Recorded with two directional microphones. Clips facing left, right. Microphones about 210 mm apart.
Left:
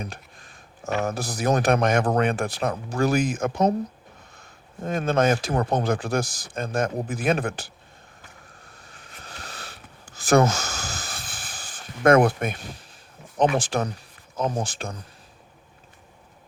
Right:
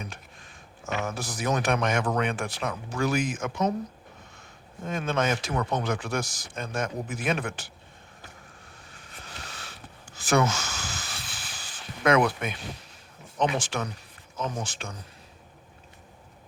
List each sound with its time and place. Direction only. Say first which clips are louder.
0.0 s speech: left 4 dB; 35° left (ahead or behind)
9.4 s a sound: left 4 dB; 40° left (ahead or behind)
13.4 s speech: left 5 dB; 35° left (ahead or behind)